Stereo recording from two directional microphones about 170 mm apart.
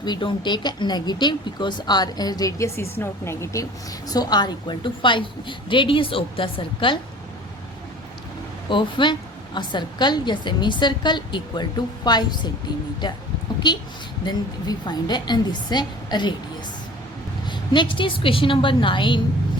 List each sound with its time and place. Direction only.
0.0 s speech: 30° left (ahead or behind)
8.7 s speech: 30° left (ahead or behind)
13.6 s speech: 25° left (ahead or behind)
17.4 s speech: 25° left (ahead or behind)